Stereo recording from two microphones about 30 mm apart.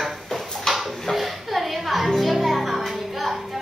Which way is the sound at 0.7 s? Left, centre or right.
Centre.